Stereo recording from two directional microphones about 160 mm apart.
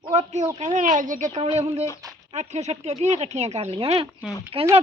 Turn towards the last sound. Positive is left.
turn(degrees=-35)  # may be behind; listen again after turning